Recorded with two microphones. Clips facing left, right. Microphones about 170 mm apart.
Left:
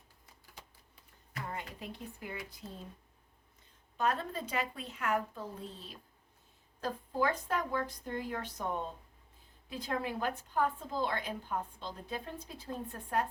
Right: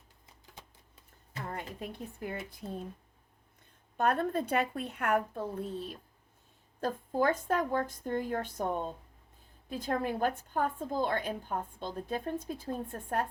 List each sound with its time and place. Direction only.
1.8 s a woman's voice: 50° right (ahead or behind)
3.9 s a woman's voice: 55° right (ahead or behind)